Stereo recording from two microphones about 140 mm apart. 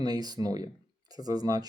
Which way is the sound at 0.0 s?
30° right (ahead or behind).